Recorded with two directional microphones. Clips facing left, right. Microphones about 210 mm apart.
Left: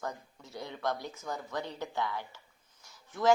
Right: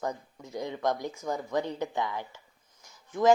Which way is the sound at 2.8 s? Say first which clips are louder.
Right 4 dB; 15° right (ahead or behind).